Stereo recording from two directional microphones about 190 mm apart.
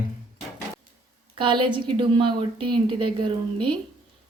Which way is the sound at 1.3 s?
25° right (ahead or behind).